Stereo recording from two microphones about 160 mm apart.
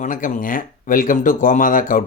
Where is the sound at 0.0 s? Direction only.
55° left (ahead or behind).